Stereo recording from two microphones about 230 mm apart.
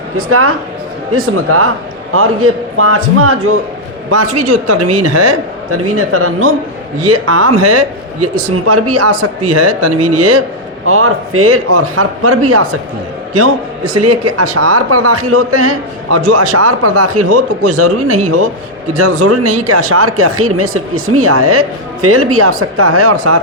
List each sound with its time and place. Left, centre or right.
0.3 s speech: right
4.1 s a man's voice: right
7.0 s a man's voice: right
10.8 s a man's voice: right
16.1 s a man's voice: right
18.9 s speech: right